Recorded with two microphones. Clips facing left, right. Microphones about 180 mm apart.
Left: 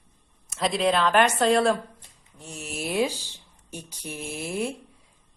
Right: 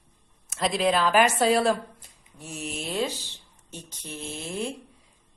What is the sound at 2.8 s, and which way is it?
Speech, 10° left (ahead or behind).